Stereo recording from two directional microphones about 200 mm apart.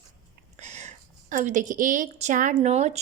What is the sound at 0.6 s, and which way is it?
A woman's voice, 35° right (ahead or behind).